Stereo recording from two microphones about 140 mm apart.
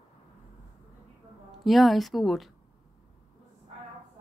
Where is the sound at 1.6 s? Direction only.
Centre (ahead or behind).